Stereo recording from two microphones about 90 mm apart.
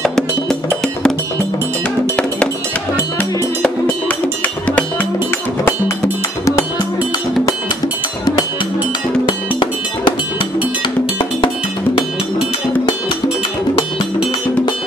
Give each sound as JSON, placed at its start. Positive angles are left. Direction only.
{"t": 0.0, "sound": "music", "side_deg": 5}
{"t": 4.2, "sound": "music", "side_deg": 15}
{"t": 9.2, "sound": "cowbell", "side_deg": 65}